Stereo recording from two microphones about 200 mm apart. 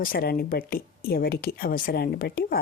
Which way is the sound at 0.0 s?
50° left (ahead or behind).